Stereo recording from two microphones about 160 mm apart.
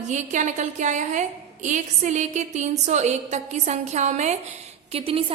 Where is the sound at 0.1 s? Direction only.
50° right (ahead or behind).